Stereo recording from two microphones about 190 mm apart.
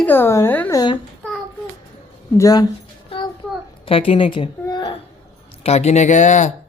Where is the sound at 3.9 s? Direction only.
30° left (ahead or behind).